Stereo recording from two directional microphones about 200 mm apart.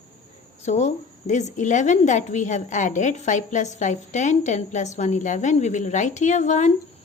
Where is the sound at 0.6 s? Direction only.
35° left (ahead or behind).